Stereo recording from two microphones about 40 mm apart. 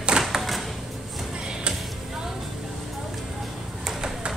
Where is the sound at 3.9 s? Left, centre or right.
Centre.